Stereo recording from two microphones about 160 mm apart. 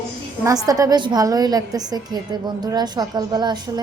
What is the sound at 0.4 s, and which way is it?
A woman's voice, 20° right (ahead or behind).